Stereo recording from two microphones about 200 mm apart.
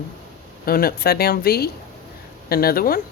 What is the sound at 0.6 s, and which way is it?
Speech, 50° left (ahead or behind).